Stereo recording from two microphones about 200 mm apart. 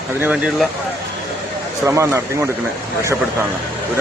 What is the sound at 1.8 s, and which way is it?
Speech, 15° right (ahead or behind).